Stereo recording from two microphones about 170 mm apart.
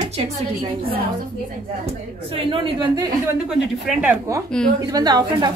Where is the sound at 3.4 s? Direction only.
5° right (ahead or behind).